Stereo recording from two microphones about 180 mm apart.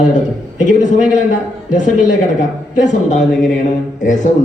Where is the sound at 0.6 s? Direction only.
45° left (ahead or behind).